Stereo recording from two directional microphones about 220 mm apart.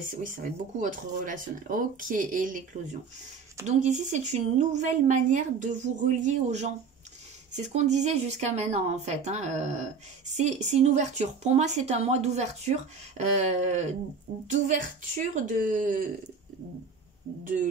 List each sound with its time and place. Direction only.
0.0 s speech: 35° right (ahead or behind)